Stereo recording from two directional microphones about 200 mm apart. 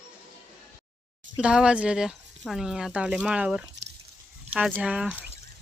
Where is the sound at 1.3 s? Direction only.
5° right (ahead or behind).